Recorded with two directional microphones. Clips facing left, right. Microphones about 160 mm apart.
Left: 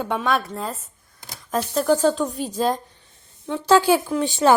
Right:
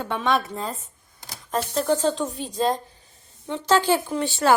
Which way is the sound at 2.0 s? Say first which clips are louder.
Left 4 dB; centre (ahead or behind).